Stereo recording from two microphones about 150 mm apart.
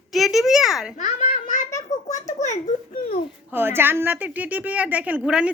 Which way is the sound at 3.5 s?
15° right (ahead or behind).